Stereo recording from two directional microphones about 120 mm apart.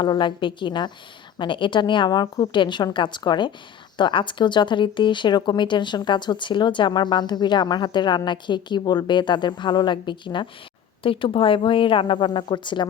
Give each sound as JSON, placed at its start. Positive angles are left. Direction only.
{"t": 0.0, "sound": "speech", "side_deg": 40}